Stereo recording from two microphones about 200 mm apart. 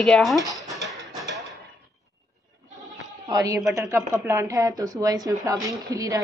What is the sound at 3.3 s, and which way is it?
Speech, 15° right (ahead or behind).